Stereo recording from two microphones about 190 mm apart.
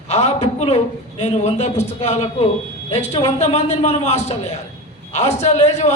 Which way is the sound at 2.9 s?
35° left (ahead or behind).